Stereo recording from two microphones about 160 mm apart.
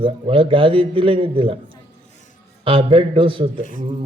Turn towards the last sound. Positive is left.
turn(degrees=-35)  # may be behind; listen again after turning